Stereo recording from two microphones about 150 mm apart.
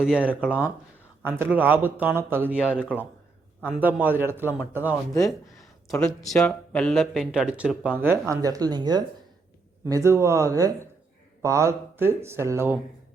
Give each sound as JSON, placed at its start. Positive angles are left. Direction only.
{"t": 0.0, "sound": "speech", "side_deg": -5}
{"t": 6.0, "sound": "speech", "side_deg": 5}
{"t": 8.3, "sound": "a man's voice", "side_deg": -25}